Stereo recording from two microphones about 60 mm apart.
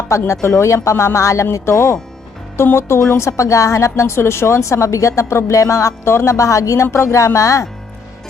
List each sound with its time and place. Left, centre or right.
0.1 s a woman's voice: left
3.2 s a woman's voice: left
6.3 s a woman's voice: left